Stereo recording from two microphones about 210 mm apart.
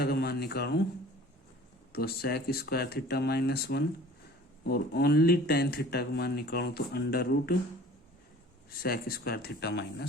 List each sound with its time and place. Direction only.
0.0 s a man's voice: 45° left (ahead or behind)
1.9 s speech: 45° left (ahead or behind)
8.8 s speech: 45° left (ahead or behind)